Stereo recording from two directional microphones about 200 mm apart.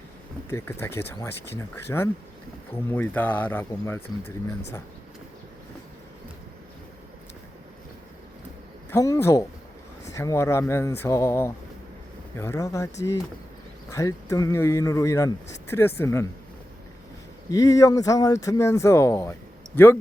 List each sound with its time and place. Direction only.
0.5 s speech: 10° left (ahead or behind)
8.9 s speech: 15° left (ahead or behind)
17.5 s speech: 15° left (ahead or behind)